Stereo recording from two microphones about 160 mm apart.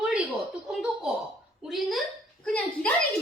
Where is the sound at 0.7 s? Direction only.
5° right (ahead or behind).